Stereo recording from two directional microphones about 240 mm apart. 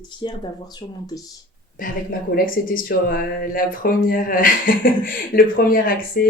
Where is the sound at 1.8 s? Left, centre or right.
Left.